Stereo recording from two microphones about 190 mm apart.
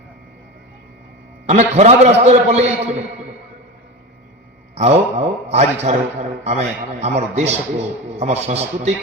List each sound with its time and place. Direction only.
1.5 s a man's voice: 35° right (ahead or behind)
4.7 s a man's voice: 35° right (ahead or behind)